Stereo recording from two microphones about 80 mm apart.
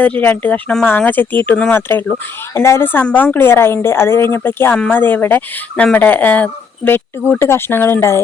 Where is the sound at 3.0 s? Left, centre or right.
Centre.